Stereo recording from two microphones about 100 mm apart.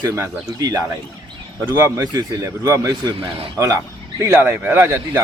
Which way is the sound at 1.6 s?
25° right (ahead or behind).